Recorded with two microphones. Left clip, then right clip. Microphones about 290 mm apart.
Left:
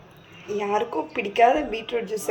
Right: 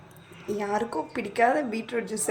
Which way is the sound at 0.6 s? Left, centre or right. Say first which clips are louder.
Left 4 dB; right.